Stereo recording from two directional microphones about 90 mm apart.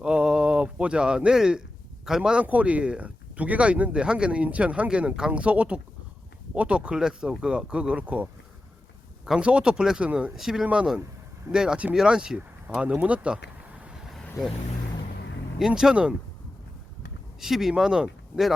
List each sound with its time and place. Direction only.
0.0 s a sound: 10° right (ahead or behind)
2.0 s speech: 5° right (ahead or behind)
15.5 s speech: 5° right (ahead or behind)
17.4 s speech: 5° right (ahead or behind)